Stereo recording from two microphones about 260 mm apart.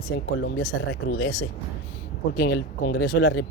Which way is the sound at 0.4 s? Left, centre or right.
Left.